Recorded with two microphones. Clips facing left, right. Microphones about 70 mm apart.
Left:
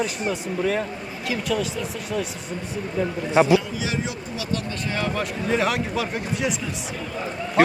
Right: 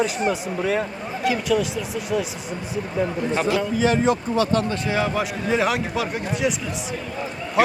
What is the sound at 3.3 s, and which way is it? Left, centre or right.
Speech, centre.